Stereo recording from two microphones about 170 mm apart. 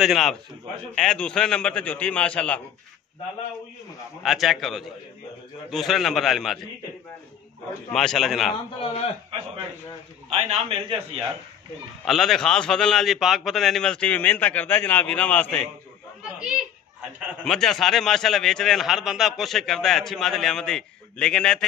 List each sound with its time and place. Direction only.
0.0 s a man's voice: centre (ahead or behind)
4.2 s a man's voice: centre (ahead or behind)
7.9 s a man's voice: centre (ahead or behind)
8.7 s a man's voice: 35° left (ahead or behind)
10.3 s a man's voice: 35° right (ahead or behind)
12.0 s a man's voice: centre (ahead or behind)
17.3 s a man's voice: centre (ahead or behind)